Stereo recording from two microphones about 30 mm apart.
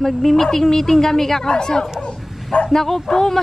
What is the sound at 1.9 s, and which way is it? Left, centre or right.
Bow-wow, left.